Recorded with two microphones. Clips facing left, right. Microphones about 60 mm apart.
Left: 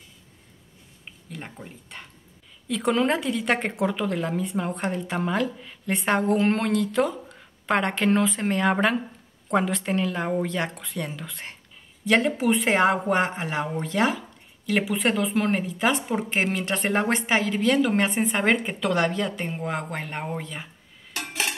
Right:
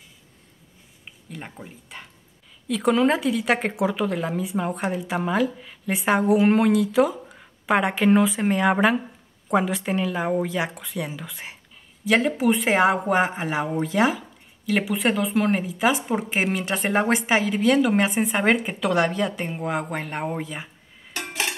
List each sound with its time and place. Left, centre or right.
1.3 s speech: centre